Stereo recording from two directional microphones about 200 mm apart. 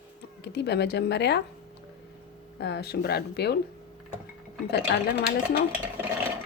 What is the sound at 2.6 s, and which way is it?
Speech, 55° left (ahead or behind).